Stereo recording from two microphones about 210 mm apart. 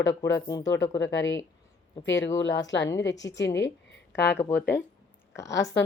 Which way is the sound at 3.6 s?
55° left (ahead or behind).